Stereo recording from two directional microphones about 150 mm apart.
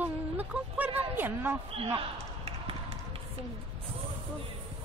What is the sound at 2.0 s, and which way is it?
Basketball bounce, 40° right (ahead or behind).